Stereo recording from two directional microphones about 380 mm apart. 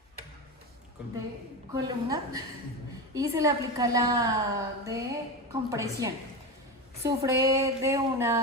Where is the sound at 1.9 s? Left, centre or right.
Centre.